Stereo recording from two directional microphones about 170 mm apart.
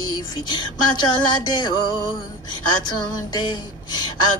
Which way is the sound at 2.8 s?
25° left (ahead or behind).